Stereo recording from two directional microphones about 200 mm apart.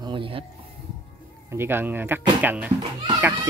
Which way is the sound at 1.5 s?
10° right (ahead or behind).